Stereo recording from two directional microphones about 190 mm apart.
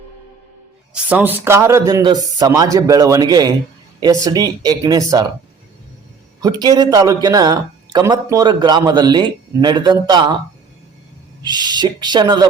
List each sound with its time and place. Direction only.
0.9 s speech: 10° right (ahead or behind)
6.4 s speech: 20° right (ahead or behind)
11.4 s speech: 20° right (ahead or behind)